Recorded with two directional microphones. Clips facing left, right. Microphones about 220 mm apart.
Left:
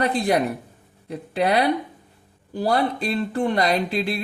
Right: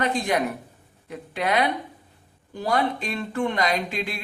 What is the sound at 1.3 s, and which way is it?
Speech, 35° left (ahead or behind).